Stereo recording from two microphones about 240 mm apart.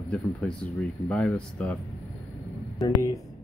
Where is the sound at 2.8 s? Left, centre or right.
Centre.